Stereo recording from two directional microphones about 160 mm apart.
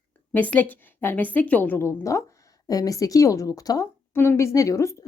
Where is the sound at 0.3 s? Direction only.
10° left (ahead or behind).